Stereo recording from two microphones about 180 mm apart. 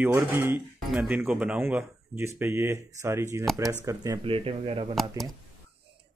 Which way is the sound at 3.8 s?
20° right (ahead or behind).